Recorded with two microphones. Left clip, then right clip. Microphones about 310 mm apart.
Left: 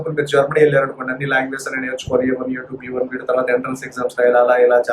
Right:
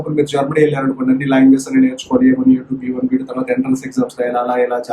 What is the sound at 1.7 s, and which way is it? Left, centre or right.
Speech, left.